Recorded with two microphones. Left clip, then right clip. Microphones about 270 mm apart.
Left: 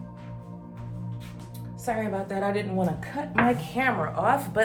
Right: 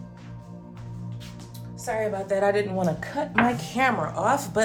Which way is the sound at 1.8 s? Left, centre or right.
Right.